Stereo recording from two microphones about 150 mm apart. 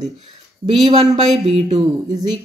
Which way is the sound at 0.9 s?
40° right (ahead or behind).